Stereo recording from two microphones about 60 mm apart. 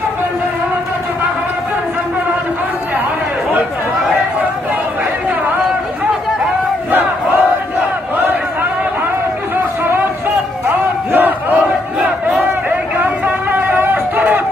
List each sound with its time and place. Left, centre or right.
6.9 s crowd: right
10.7 s crowd: right
12.6 s a sound: right